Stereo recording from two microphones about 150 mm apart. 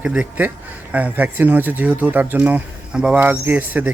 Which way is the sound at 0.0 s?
10° right (ahead or behind).